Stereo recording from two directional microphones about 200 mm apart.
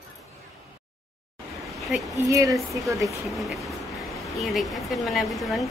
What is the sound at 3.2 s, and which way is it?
A woman's voice, centre (ahead or behind).